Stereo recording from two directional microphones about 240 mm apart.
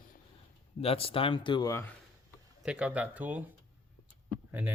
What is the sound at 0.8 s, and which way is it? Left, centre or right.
Speech, left.